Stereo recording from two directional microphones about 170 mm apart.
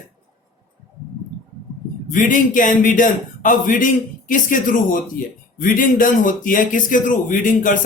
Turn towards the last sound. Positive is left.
turn(degrees=50)  # may be behind; listen again after turning